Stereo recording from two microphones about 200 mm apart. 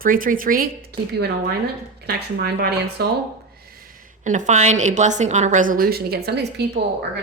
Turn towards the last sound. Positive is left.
turn(degrees=-55)  # may be behind; listen again after turning